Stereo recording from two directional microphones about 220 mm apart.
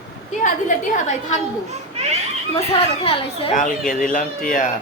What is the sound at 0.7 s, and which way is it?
Speech, 35° left (ahead or behind).